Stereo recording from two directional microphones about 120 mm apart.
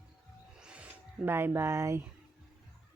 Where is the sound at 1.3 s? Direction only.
20° right (ahead or behind).